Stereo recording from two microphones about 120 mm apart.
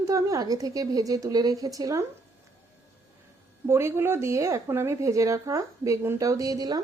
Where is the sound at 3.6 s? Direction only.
20° right (ahead or behind).